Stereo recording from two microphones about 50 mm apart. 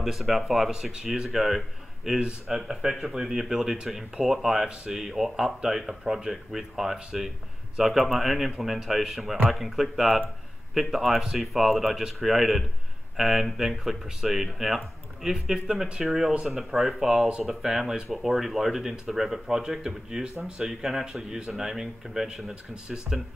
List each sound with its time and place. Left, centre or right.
0.0 s speech: centre
2.0 s speech: centre
8.5 s speech: centre